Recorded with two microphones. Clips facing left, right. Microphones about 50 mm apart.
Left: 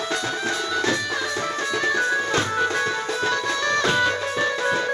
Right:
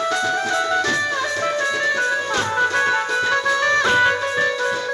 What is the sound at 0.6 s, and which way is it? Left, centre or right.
Music, right.